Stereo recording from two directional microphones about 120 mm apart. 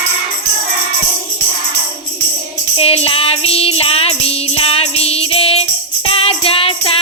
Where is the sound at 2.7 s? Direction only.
55° left (ahead or behind).